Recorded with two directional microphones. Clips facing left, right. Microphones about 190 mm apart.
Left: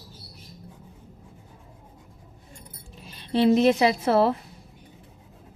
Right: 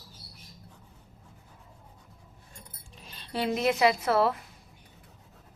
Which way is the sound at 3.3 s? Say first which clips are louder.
Left 9 dB; 30° left (ahead or behind).